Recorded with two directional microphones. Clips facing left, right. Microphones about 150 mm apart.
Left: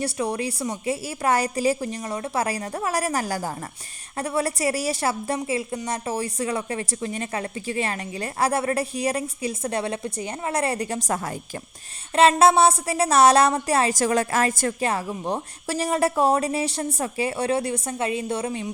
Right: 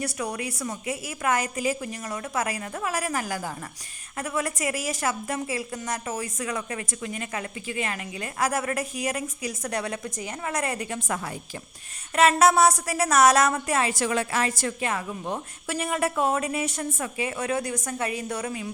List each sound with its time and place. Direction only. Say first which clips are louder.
0.0 s a woman's voice: left 5 dB; 30° left (ahead or behind)
12.4 s a woman's voice: left 2 dB; 30° left (ahead or behind); by 14.8 s 45° left (ahead or behind)
14.8 s a woman's voice: left 4 dB; 35° left (ahead or behind)